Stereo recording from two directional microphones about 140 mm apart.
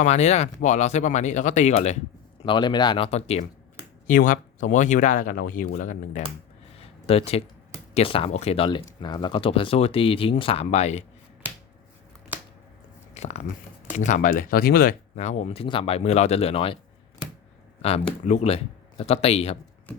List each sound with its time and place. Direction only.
0.0 s speech: 50° left (ahead or behind)
2.4 s speech: 35° left (ahead or behind)
3.1 s speech: 50° left (ahead or behind)
4.0 s speech: 70° left (ahead or behind)
6.7 s a sound: 45° left (ahead or behind)
7.9 s speech: 40° left (ahead or behind)
13.1 s speech: 55° left (ahead or behind); by 15.2 s 90° left
15.2 s speech: 55° left (ahead or behind)
17.8 s speech: 50° left (ahead or behind)